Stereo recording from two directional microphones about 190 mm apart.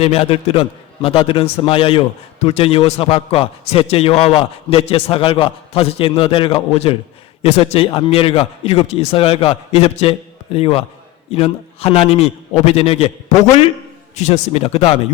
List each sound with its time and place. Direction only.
0.0 s a man's voice: 30° left (ahead or behind)